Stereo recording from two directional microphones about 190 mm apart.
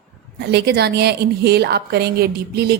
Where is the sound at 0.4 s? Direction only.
60° right (ahead or behind).